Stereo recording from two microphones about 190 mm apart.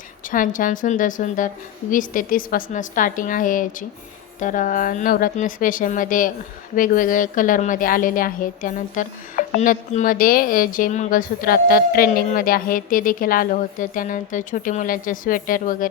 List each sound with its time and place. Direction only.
0.3 s a woman's voice: 45° left (ahead or behind)